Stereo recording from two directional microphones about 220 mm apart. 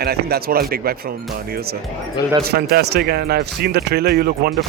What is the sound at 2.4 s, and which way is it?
Speech, 45° right (ahead or behind).